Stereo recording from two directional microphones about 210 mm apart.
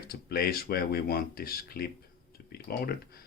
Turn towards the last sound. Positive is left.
turn(degrees=45)  # may be behind; listen again after turning